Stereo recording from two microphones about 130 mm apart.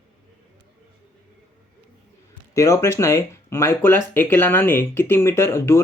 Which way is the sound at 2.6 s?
20° left (ahead or behind).